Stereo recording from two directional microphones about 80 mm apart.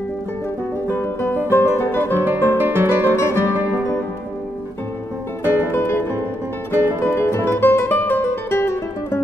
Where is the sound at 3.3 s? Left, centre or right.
Right.